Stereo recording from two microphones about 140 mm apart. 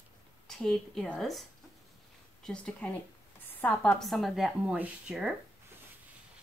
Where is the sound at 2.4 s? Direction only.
10° left (ahead or behind).